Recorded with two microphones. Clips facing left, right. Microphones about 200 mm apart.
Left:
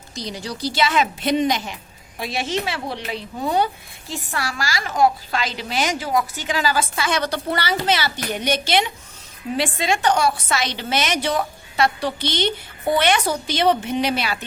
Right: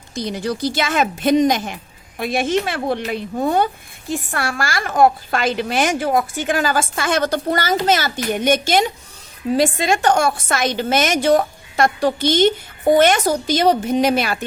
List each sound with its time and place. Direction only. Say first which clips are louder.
0.1 s a woman's voice: right 7 dB; 55° right (ahead or behind)